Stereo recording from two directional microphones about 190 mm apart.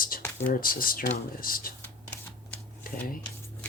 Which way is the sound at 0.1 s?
50° left (ahead or behind).